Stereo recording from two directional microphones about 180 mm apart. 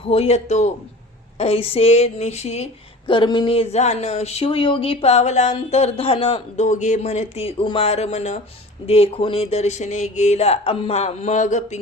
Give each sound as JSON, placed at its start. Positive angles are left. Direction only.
{"t": 0.0, "sound": "speech", "side_deg": 35}